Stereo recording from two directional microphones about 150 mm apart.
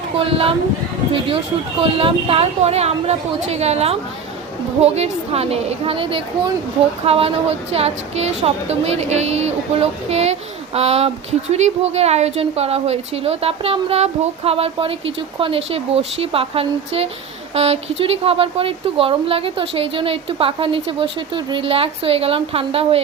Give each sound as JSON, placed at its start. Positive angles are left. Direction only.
{"t": 1.8, "sound": "a woman's voice", "side_deg": -40}